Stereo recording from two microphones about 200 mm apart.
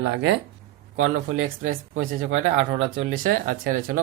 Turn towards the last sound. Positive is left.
turn(degrees=-40)  # may be behind; listen again after turning